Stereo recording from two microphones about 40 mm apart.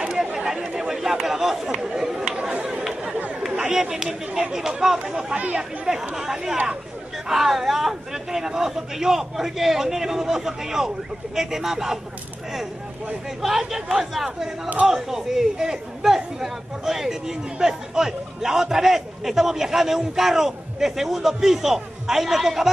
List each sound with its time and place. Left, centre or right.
0.1 s chatter: centre
2.5 s chatter: right
3.7 s a man's voice: centre
13.4 s a man's voice: centre